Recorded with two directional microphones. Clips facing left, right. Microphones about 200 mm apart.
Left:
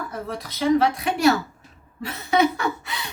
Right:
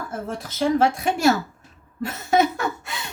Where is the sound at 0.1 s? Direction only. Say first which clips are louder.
Right 1 dB; 45° right (ahead or behind).